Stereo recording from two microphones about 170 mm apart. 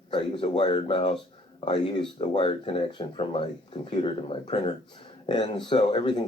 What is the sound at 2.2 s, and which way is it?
Speech, 30° left (ahead or behind).